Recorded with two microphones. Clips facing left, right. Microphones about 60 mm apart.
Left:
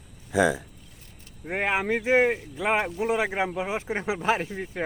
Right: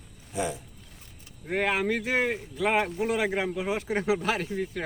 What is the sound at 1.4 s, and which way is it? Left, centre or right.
Speech, left.